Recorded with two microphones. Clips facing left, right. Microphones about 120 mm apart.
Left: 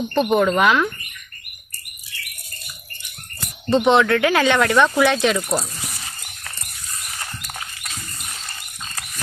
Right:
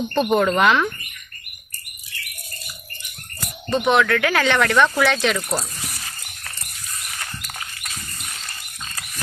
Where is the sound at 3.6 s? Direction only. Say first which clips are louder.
Left 3 dB; 25° left (ahead or behind).